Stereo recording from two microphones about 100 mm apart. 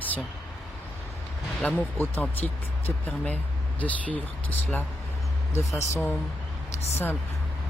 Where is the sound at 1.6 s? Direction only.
15° left (ahead or behind).